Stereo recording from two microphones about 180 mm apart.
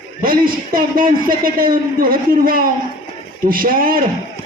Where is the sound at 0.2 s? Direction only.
50° right (ahead or behind).